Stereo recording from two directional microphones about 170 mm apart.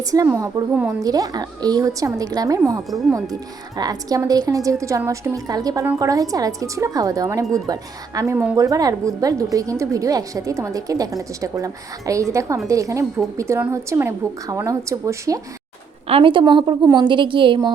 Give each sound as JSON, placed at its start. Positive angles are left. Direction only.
{"t": 0.0, "sound": "a woman's voice", "side_deg": -20}
{"t": 16.0, "sound": "a woman's voice", "side_deg": -30}